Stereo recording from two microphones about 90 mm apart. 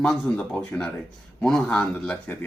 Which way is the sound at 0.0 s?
5° left (ahead or behind).